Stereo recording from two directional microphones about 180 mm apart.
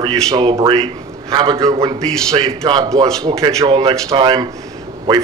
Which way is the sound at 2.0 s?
5° left (ahead or behind).